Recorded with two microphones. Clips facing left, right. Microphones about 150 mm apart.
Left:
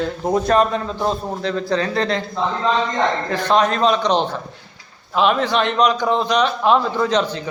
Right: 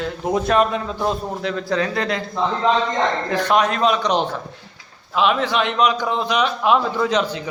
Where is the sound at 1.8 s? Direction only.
30° left (ahead or behind).